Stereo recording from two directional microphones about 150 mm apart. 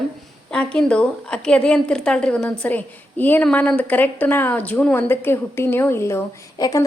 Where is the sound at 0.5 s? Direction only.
5° left (ahead or behind).